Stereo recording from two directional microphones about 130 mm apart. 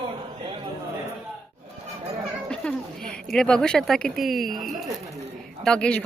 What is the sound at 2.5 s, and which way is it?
Speech, 5° left (ahead or behind).